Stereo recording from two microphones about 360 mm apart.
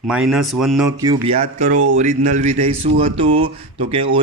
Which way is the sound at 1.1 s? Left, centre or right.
Centre.